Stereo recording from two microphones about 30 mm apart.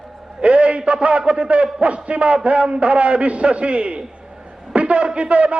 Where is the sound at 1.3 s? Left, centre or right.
Right.